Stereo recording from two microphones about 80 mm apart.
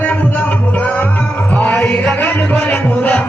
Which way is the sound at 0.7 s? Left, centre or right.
Centre.